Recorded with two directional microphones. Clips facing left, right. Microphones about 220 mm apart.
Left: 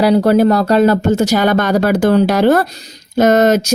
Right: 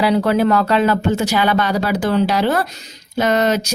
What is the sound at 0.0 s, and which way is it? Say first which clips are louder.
Speech: left 5 dB; 40° left (ahead or behind).